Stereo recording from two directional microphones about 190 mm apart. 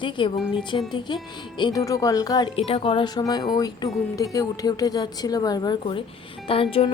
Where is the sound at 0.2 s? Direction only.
25° left (ahead or behind).